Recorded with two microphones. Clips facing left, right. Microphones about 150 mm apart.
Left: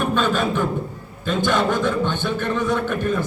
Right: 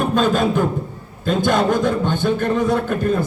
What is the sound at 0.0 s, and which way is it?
A man's voice, 35° right (ahead or behind).